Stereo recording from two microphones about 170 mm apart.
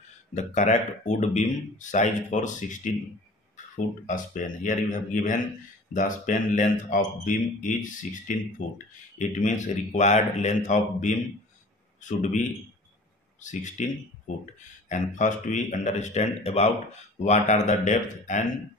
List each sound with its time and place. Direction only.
0.3 s speech: 45° left (ahead or behind)
13.4 s speech: 45° left (ahead or behind)